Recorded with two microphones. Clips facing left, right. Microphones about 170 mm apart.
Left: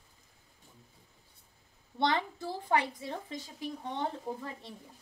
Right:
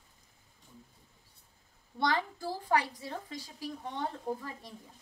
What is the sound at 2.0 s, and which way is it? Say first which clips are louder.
A woman's voice: left 1 dB; 25° left (ahead or behind).